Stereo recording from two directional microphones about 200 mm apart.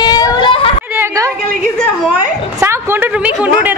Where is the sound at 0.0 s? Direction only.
20° left (ahead or behind).